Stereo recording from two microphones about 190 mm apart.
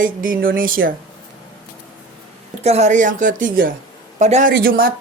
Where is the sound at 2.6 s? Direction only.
35° right (ahead or behind).